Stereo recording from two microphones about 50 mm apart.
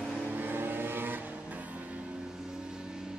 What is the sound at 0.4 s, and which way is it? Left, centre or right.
Vehicle, right.